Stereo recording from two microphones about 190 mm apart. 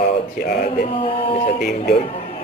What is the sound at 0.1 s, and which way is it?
Speech, 55° left (ahead or behind).